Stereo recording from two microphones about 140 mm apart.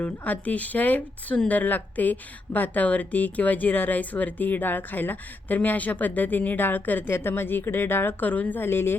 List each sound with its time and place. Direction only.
0.0 s speech: 10° left (ahead or behind)